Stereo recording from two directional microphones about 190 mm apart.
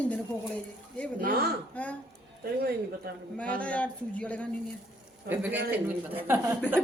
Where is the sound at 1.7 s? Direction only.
5° left (ahead or behind).